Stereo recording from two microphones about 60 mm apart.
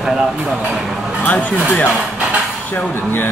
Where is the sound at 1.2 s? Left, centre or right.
Left.